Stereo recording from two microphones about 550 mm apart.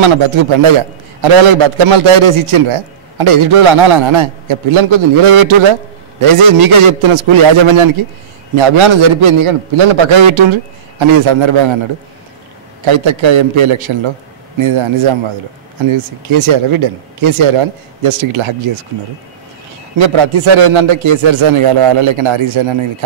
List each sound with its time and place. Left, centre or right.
0.0 s a man's voice: right
12.8 s a man's voice: right
20.0 s a man's voice: right